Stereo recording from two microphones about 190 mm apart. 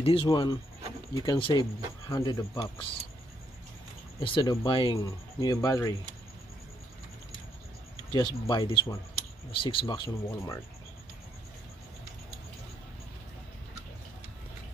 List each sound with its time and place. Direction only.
0.0 s speech: 25° left (ahead or behind)
4.2 s speech: 25° left (ahead or behind)
8.1 s speech: 20° left (ahead or behind)